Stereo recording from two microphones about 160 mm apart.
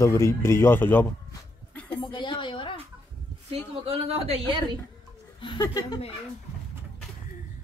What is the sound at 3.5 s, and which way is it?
A woman's voice, 40° right (ahead or behind).